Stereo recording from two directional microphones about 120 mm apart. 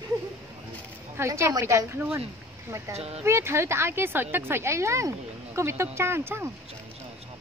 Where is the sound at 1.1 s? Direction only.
25° right (ahead or behind).